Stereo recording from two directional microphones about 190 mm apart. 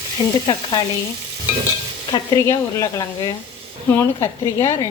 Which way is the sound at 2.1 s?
15° left (ahead or behind).